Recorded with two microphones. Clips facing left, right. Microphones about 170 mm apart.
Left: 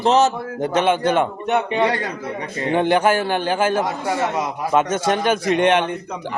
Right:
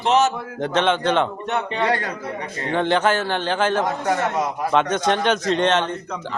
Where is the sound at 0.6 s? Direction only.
10° left (ahead or behind).